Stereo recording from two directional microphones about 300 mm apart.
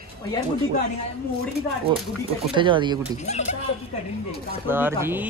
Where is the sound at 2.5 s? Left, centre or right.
Centre.